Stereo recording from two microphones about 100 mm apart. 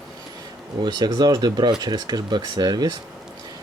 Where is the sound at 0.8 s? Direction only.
45° right (ahead or behind).